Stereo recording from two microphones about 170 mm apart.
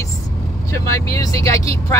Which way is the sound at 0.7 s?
20° left (ahead or behind).